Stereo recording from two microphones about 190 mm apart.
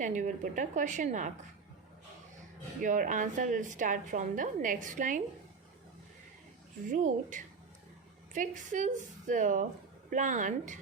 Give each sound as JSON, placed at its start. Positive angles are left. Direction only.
{"t": 0.0, "sound": "a woman's voice", "side_deg": -40}
{"t": 2.8, "sound": "a woman's voice", "side_deg": -40}
{"t": 6.9, "sound": "a woman's voice", "side_deg": -40}